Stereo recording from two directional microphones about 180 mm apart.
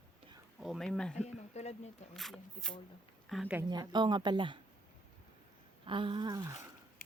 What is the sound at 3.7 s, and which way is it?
Speech, 25° right (ahead or behind).